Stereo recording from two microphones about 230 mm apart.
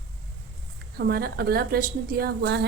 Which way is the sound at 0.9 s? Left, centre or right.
Right.